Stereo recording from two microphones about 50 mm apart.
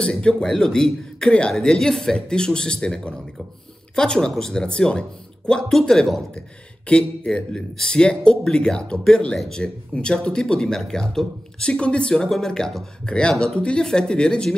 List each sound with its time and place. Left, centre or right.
0.0 s a woman's voice: centre